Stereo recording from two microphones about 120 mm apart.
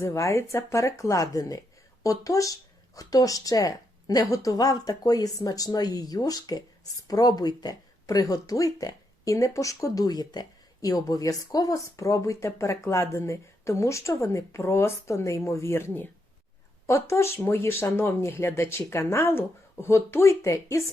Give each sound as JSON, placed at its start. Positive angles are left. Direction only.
{"t": 0.0, "sound": "speech", "side_deg": 25}